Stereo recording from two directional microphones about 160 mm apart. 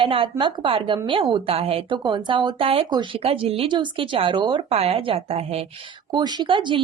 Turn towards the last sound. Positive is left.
turn(degrees=-30)  # may be behind; listen again after turning